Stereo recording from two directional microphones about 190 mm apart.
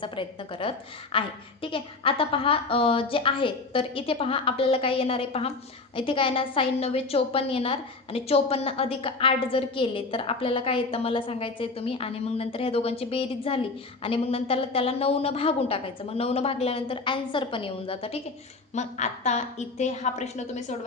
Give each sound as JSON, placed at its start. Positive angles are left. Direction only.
{"t": 0.0, "sound": "a woman's voice", "side_deg": 25}